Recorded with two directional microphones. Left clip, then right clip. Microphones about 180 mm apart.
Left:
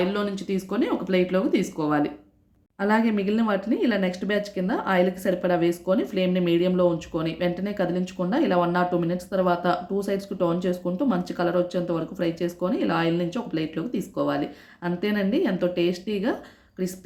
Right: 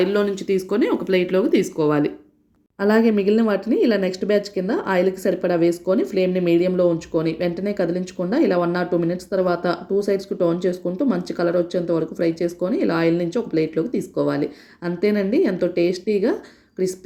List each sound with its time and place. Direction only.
0.0 s a woman's voice: 25° right (ahead or behind)